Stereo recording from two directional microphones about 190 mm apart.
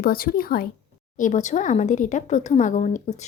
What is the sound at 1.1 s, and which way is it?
Speech, 40° left (ahead or behind).